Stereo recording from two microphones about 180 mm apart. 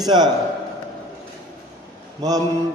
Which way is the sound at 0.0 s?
25° right (ahead or behind).